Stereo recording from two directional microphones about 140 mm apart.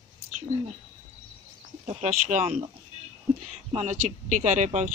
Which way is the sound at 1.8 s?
55° right (ahead or behind).